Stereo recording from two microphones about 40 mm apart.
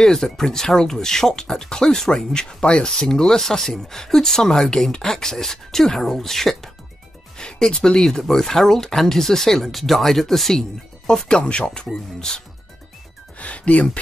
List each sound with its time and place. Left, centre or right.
0.0 s speech: centre
7.3 s speech: centre
11.2 s speech: left
13.4 s music: left